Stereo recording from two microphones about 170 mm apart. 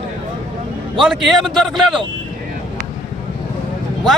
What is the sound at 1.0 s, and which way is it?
Speech, centre (ahead or behind).